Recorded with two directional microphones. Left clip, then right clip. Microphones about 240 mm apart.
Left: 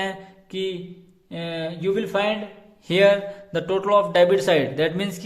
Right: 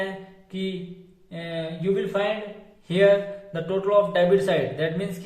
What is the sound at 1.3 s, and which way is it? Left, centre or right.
Speech, left.